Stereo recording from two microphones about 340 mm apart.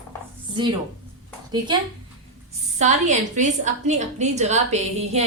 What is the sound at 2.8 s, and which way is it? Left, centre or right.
A woman's voice, right.